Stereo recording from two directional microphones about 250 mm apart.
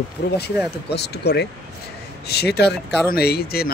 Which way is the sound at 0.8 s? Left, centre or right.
Left.